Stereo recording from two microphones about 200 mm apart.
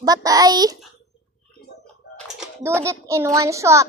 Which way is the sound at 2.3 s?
10° right (ahead or behind).